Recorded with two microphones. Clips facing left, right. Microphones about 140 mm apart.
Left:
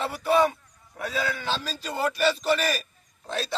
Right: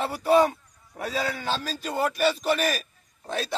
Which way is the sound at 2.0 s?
10° right (ahead or behind).